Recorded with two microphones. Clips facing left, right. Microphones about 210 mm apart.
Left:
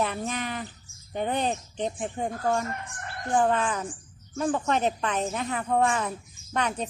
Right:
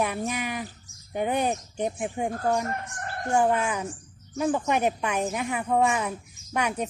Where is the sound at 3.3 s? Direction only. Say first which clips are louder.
Right 1 dB; 10° right (ahead or behind).